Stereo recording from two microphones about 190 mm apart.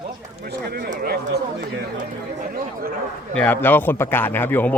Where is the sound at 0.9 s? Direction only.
50° right (ahead or behind).